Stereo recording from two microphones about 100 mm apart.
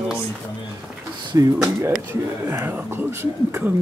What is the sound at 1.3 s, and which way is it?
Speech, 30° right (ahead or behind).